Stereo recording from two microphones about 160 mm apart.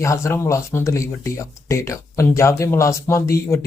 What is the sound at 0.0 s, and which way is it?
Speech, 20° left (ahead or behind).